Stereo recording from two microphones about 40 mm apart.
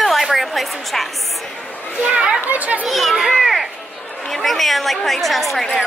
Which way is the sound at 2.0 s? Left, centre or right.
Right.